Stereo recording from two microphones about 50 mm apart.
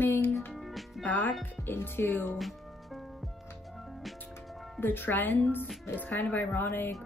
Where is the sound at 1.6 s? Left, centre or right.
Left.